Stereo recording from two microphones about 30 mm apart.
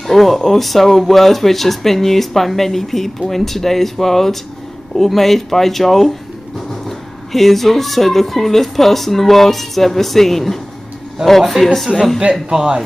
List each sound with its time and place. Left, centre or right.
0.0 s speech: centre
11.8 s a woman's voice: centre
12.4 s a man's voice: right